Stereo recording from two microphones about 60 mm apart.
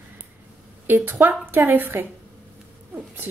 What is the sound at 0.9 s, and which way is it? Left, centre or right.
A woman's voice, right.